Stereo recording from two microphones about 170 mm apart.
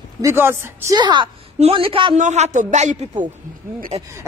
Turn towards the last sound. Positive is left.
turn(degrees=-40)  # may be behind; listen again after turning